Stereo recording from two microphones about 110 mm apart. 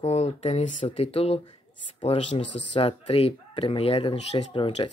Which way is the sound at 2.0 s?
80° left.